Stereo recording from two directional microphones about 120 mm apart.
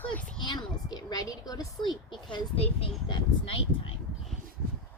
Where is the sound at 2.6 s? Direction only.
55° left (ahead or behind).